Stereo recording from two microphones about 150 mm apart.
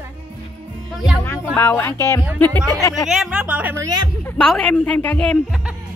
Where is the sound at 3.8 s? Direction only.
30° right (ahead or behind).